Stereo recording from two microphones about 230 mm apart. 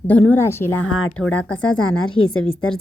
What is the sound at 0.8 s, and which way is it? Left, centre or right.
Speech, left.